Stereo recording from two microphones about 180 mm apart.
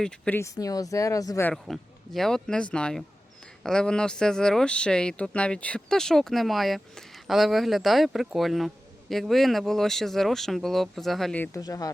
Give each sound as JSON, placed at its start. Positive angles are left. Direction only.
{"t": 0.0, "sound": "speech", "side_deg": 5}
{"t": 1.6, "sound": "speech", "side_deg": 0}
{"t": 11.5, "sound": "speech", "side_deg": 20}